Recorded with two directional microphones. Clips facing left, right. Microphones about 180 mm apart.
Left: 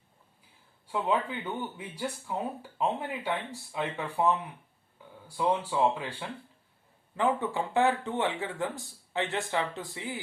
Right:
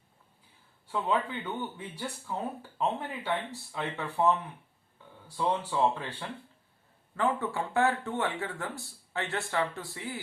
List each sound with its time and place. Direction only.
0.9 s speech: 15° left (ahead or behind)
5.5 s speech: 10° left (ahead or behind)